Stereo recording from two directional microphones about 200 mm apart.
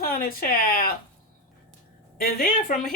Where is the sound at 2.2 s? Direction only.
45° left (ahead or behind).